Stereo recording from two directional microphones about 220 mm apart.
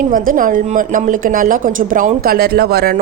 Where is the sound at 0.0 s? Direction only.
40° right (ahead or behind).